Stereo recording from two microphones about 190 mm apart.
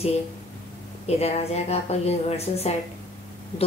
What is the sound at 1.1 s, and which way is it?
A woman's voice, 35° left (ahead or behind).